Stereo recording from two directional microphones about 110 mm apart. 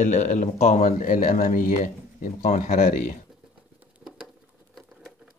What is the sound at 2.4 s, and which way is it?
Speech, 90° left.